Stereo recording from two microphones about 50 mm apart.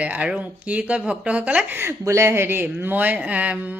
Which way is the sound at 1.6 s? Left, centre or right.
Right.